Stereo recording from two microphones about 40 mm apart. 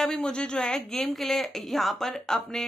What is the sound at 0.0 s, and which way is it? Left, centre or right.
Speech, centre.